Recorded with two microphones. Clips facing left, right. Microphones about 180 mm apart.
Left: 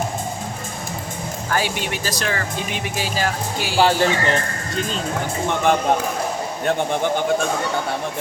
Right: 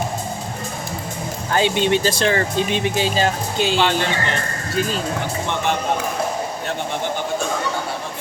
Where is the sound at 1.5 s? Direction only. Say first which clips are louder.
Right 6 dB; 25° right (ahead or behind).